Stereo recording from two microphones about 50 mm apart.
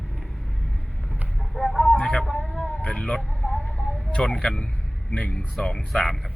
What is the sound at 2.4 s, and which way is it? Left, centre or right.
Vehicle, centre.